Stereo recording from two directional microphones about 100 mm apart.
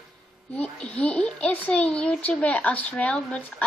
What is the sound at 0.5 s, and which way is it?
A woman's voice, 10° left (ahead or behind).